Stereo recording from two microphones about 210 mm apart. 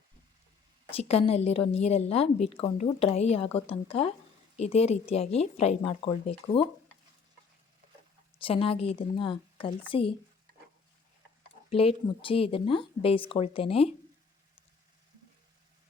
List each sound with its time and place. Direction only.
0.9 s a woman's voice: 30° left (ahead or behind)
8.4 s a woman's voice: 25° left (ahead or behind)
11.7 s a woman's voice: 25° left (ahead or behind)